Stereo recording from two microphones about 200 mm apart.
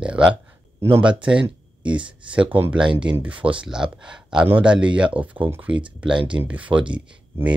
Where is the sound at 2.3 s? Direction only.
5° right (ahead or behind).